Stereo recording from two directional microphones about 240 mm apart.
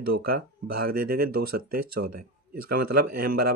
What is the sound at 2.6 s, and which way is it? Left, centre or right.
Speech, right.